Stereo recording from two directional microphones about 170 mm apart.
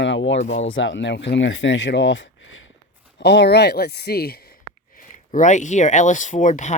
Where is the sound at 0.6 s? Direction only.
90° left; by 4.5 s 65° left (ahead or behind).